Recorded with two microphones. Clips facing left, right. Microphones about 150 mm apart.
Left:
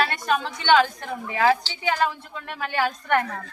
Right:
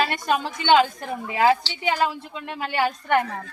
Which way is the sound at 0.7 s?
20° right (ahead or behind).